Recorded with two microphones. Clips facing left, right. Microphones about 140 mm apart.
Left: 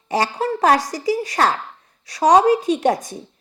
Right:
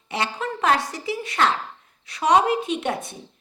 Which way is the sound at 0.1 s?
40° left (ahead or behind).